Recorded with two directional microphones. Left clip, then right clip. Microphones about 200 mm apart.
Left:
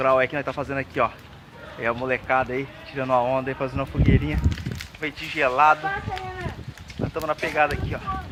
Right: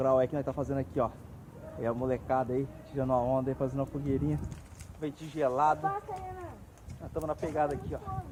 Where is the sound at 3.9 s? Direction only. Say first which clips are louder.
Left 10 dB; 45° left (ahead or behind).